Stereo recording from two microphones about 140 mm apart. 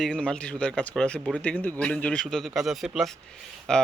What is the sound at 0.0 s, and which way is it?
A man's voice, 5° left (ahead or behind).